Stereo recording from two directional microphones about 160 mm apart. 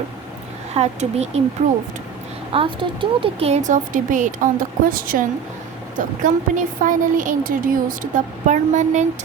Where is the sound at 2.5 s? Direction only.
35° right (ahead or behind); by 4.4 s 55° right (ahead or behind).